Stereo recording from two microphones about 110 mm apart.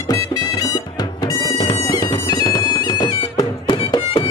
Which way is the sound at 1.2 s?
40° left (ahead or behind).